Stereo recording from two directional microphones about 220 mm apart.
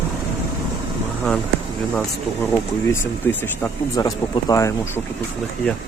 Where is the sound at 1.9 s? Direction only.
5° left (ahead or behind).